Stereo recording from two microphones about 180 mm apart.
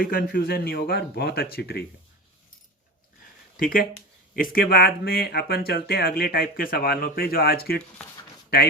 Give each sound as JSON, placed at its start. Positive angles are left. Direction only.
{"t": 0.0, "sound": "speech", "side_deg": 55}
{"t": 3.6, "sound": "speech", "side_deg": 50}